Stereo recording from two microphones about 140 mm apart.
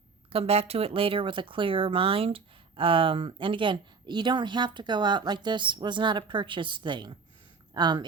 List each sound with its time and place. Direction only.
0.3 s speech: 45° right (ahead or behind)